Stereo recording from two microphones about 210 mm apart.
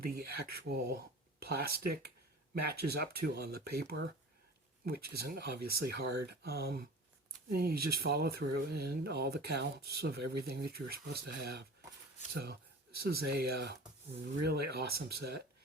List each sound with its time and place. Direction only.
0.0 s speech: 45° right (ahead or behind)